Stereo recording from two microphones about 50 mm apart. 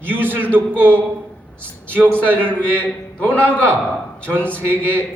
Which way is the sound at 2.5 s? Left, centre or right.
Left.